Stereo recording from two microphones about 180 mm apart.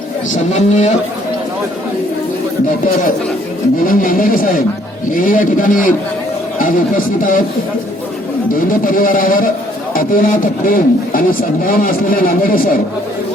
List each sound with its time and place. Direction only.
0.3 s a man's voice: 40° left (ahead or behind)
3.8 s a man's voice: 50° left (ahead or behind)
8.8 s a man's voice: 50° left (ahead or behind)